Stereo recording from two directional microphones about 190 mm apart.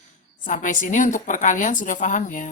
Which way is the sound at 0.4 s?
40° left (ahead or behind).